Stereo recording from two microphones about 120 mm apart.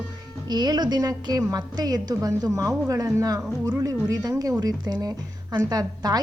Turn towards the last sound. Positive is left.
turn(degrees=-35)  # may be behind; listen again after turning